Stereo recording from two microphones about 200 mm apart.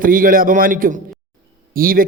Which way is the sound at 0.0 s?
45° right (ahead or behind).